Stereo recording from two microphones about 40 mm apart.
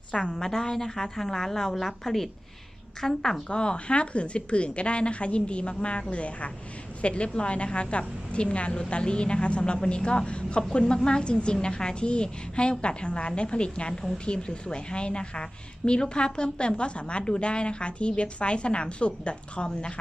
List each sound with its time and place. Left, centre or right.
0.1 s a woman's voice: left
0.3 s a woman's voice: centre
3.5 s a woman's voice: left